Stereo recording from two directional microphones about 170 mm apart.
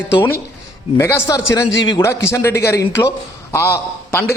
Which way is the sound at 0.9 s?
15° left (ahead or behind).